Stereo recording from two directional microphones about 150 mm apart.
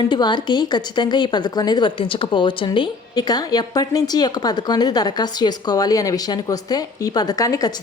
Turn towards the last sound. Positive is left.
turn(degrees=25)  # may be behind; listen again after turning